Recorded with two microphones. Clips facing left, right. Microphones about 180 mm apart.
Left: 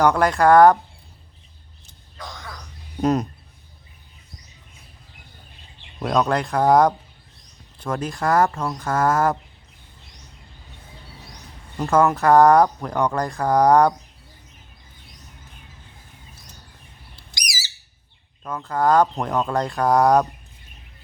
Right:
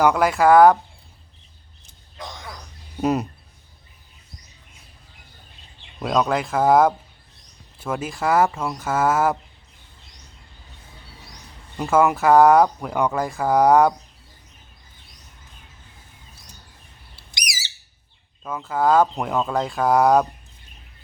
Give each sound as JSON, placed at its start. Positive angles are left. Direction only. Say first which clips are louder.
{"t": 0.0, "sound": "speech", "louder": "even", "side_deg": -5}
{"t": 2.1, "sound": "a sound", "louder": "right 1 dB", "side_deg": -20}
{"t": 3.0, "sound": "speech", "louder": "left 1 dB", "side_deg": -5}
{"t": 6.0, "sound": "speech", "louder": "even", "side_deg": 0}
{"t": 11.8, "sound": "speech", "louder": "even", "side_deg": -5}
{"t": 18.4, "sound": "speech", "louder": "even", "side_deg": -5}